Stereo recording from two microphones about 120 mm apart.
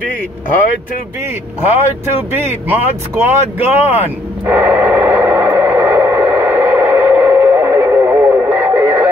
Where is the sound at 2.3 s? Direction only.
15° right (ahead or behind).